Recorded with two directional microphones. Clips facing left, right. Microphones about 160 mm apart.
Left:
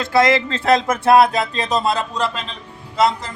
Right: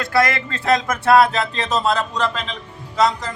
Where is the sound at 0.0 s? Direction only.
25° left (ahead or behind).